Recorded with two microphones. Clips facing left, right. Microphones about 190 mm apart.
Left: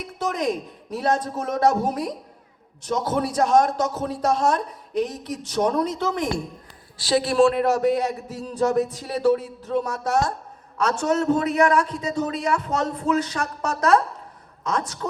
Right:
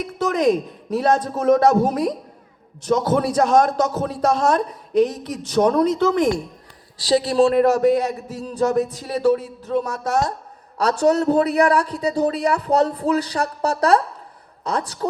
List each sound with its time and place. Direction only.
0.0 s a man's voice: 90° right
7.0 s a man's voice: 35° right (ahead or behind)